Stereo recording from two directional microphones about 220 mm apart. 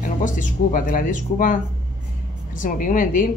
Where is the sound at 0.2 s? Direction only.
35° left (ahead or behind).